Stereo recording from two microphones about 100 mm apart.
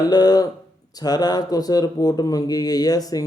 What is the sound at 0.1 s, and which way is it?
Speech, 40° left (ahead or behind).